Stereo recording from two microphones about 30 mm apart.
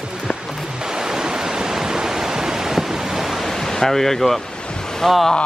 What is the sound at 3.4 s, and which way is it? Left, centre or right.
Speech, centre.